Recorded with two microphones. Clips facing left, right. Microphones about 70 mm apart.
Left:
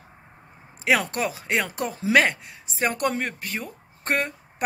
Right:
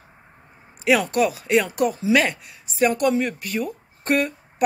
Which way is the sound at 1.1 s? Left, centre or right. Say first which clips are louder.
Right 6 dB; left.